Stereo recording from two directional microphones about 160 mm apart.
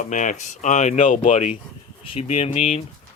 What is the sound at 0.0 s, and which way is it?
Speech, 50° left (ahead or behind).